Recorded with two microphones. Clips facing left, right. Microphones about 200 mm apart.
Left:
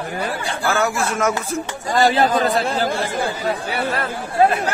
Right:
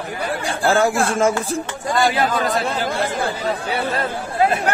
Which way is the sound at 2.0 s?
30° left (ahead or behind).